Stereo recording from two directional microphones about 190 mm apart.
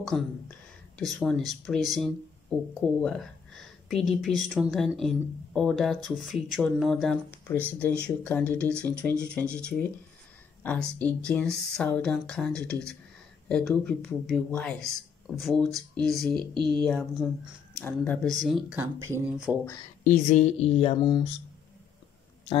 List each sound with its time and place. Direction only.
0.0 s speech: 5° left (ahead or behind)
16.3 s speech: 25° right (ahead or behind)
16.7 s speech: 5° left (ahead or behind)
18.8 s speech: 15° right (ahead or behind)
20.1 s speech: 35° left (ahead or behind)